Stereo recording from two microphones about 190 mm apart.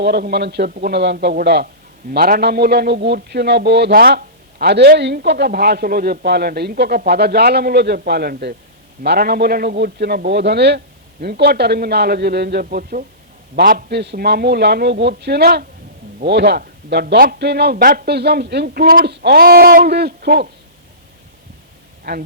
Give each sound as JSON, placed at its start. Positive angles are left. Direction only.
{"t": 0.0, "sound": "a man's voice", "side_deg": -60}
{"t": 22.1, "sound": "a man's voice", "side_deg": -60}